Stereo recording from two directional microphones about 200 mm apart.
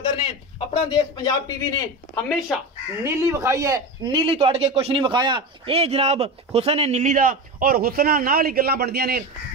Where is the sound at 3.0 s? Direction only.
15° right (ahead or behind).